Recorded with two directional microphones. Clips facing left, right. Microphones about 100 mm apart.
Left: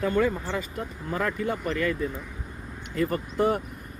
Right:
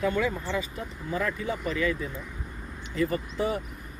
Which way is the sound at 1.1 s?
50° left (ahead or behind).